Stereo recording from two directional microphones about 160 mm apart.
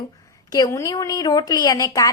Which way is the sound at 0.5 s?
20° left (ahead or behind).